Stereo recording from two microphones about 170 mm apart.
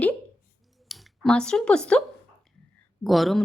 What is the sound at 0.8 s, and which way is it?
Speech, centre (ahead or behind).